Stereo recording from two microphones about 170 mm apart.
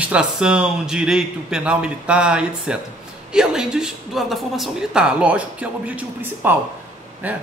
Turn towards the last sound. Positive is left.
turn(degrees=-10)  # may be behind; listen again after turning